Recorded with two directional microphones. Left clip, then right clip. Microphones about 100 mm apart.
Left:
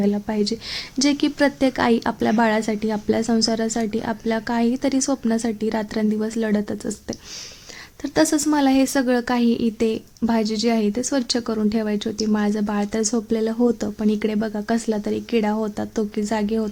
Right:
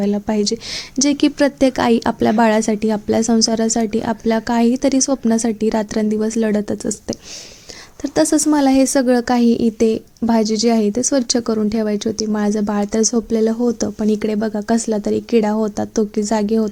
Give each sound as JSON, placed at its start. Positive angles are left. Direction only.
{"t": 0.0, "sound": "a woman's voice", "side_deg": -40}